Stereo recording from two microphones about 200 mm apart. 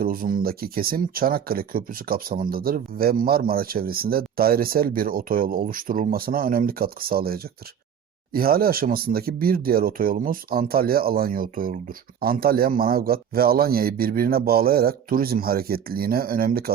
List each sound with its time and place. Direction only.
0.0 s speech: 45° right (ahead or behind)